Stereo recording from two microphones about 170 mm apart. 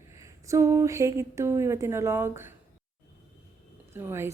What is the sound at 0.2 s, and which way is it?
Speech, 15° right (ahead or behind).